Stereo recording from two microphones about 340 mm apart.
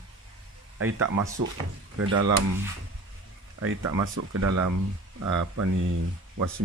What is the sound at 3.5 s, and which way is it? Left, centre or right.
Speech, right.